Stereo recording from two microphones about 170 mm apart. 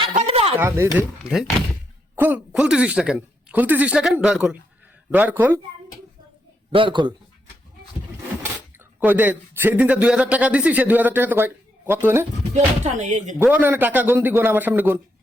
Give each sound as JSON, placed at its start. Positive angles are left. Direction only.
{"t": 0.3, "sound": "a sound", "side_deg": -35}
{"t": 0.6, "sound": "speech", "side_deg": -10}
{"t": 6.7, "sound": "a man's voice", "side_deg": -30}
{"t": 9.0, "sound": "speech", "side_deg": -10}
{"t": 12.8, "sound": "speech", "side_deg": -45}
{"t": 13.4, "sound": "speech", "side_deg": -10}